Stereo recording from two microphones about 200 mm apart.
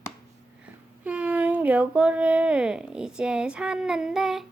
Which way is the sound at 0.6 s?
5° right (ahead or behind).